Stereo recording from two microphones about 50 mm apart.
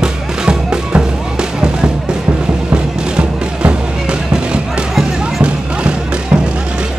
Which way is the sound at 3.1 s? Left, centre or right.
Centre.